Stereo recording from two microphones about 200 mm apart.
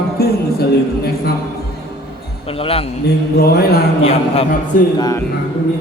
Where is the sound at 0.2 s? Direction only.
50° left (ahead or behind).